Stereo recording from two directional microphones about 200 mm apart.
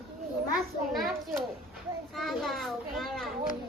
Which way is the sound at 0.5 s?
Centre (ahead or behind).